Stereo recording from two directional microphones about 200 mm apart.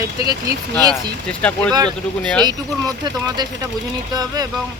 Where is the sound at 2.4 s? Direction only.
20° right (ahead or behind).